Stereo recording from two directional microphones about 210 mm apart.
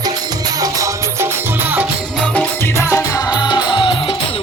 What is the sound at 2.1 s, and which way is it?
Music, 5° left (ahead or behind).